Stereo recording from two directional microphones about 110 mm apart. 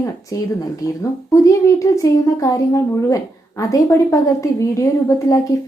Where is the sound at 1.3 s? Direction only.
30° left (ahead or behind).